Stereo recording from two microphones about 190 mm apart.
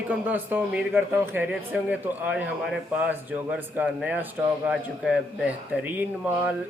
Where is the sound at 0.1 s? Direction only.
10° right (ahead or behind).